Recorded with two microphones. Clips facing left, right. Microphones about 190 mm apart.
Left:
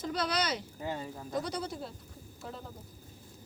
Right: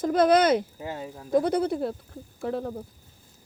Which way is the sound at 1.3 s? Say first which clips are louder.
Right 13 dB; 55° right (ahead or behind).